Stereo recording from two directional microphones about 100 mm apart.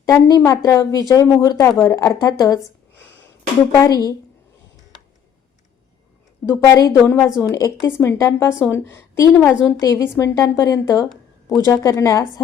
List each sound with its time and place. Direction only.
0.0 s a woman's voice: 35° left (ahead or behind)
3.8 s a woman's voice: 40° left (ahead or behind)
6.7 s a woman's voice: 35° left (ahead or behind)
7.0 s a woman's voice: 20° left (ahead or behind)
7.4 s a woman's voice: 35° left (ahead or behind)